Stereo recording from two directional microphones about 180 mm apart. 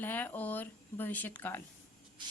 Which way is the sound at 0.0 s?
10° left (ahead or behind).